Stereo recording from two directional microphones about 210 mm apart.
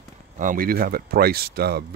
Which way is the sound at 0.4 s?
40° right (ahead or behind).